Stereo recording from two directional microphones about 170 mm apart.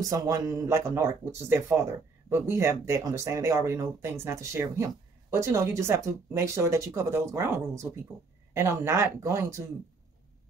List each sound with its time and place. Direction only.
0.0 s speech: 20° right (ahead or behind)